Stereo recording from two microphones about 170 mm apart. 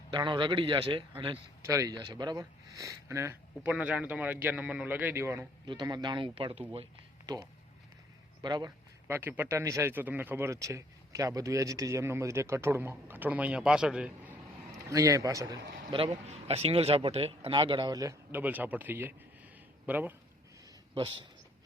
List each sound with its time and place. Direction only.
0.1 s speech: 25° right (ahead or behind)
1.6 s speech: 20° right (ahead or behind)
5.6 s speech: 25° right (ahead or behind)
7.3 s speech: 25° right (ahead or behind)
9.0 s speech: 10° right (ahead or behind)
14.7 s a man's voice: 20° right (ahead or behind)
15.9 s speech: 30° right (ahead or behind); by 20.1 s 10° right (ahead or behind)
20.9 s speech: 30° right (ahead or behind)